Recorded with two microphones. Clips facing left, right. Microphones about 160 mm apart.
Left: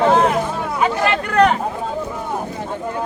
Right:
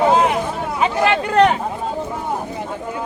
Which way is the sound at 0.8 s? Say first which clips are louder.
Right 1 dB; 25° right (ahead or behind).